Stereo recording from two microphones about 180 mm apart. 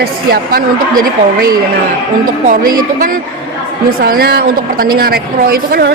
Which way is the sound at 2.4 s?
50° right (ahead or behind).